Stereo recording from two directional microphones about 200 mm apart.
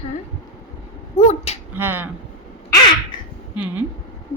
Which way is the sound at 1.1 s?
30° left (ahead or behind).